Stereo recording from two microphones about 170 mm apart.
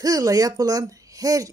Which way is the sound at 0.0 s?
20° right (ahead or behind).